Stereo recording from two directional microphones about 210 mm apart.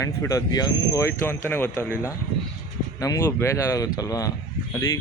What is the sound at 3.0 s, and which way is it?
Speech, 15° left (ahead or behind).